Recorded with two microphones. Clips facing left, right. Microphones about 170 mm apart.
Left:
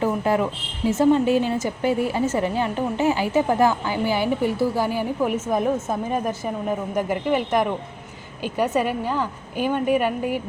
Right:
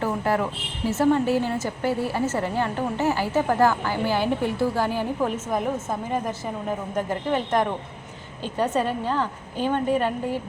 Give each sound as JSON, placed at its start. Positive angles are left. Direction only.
{"t": 0.0, "sound": "a sound", "side_deg": 20}
{"t": 0.9, "sound": "a woman's voice", "side_deg": 15}
{"t": 6.9, "sound": "a woman's voice", "side_deg": 10}